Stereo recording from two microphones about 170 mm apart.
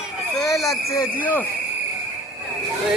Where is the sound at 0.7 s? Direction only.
15° left (ahead or behind).